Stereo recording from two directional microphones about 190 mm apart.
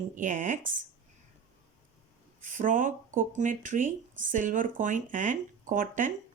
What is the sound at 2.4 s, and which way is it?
Speech, 45° right (ahead or behind).